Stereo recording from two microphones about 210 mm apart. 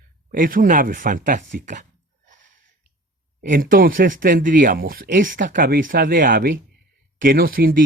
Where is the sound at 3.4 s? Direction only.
40° right (ahead or behind).